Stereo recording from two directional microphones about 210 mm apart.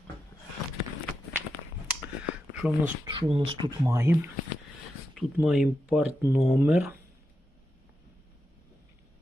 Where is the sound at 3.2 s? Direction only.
25° right (ahead or behind).